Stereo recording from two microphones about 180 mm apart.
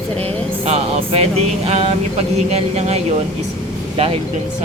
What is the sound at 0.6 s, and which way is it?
Speech, 35° right (ahead or behind).